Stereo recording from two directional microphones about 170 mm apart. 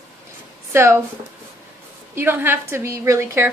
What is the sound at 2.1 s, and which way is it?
A woman's voice, 15° right (ahead or behind).